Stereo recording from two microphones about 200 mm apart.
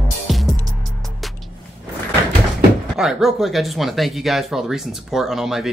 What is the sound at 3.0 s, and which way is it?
Speech, centre (ahead or behind).